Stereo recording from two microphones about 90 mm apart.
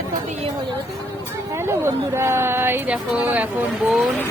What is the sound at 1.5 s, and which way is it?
Speech, 30° right (ahead or behind).